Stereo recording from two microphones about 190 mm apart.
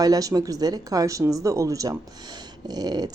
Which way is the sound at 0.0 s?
20° right (ahead or behind).